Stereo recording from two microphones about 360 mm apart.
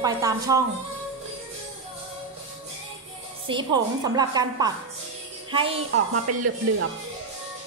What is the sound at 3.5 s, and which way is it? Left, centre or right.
A woman's voice, centre.